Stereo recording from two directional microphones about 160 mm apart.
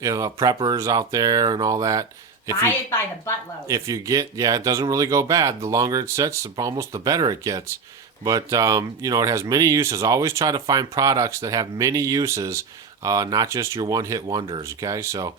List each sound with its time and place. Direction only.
0.0 s speech: 20° right (ahead or behind)
3.7 s speech: 20° right (ahead or behind)